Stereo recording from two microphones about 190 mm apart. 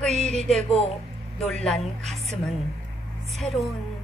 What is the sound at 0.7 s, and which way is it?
Speech, 30° left (ahead or behind).